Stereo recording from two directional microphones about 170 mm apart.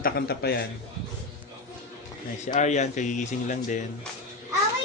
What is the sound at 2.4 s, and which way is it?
Speech, 45° left (ahead or behind).